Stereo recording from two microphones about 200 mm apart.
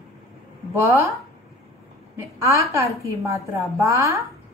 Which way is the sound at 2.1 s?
15° right (ahead or behind).